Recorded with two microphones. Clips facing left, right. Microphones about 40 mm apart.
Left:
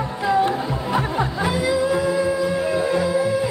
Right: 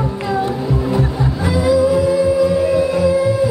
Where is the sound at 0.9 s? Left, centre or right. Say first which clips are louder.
Right 2 dB; left.